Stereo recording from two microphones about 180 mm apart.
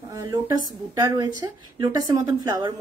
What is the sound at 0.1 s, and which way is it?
A woman's voice, 20° right (ahead or behind).